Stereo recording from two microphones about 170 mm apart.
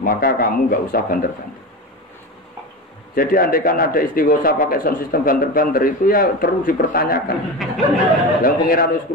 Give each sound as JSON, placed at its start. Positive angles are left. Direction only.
{"t": 0.0, "sound": "a man's voice", "side_deg": 60}
{"t": 3.2, "sound": "a man's voice", "side_deg": 60}
{"t": 7.5, "sound": "speech", "side_deg": 0}
{"t": 8.4, "sound": "a man's voice", "side_deg": 60}